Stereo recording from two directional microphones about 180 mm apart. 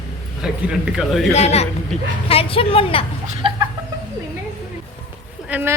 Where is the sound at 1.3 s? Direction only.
35° left (ahead or behind).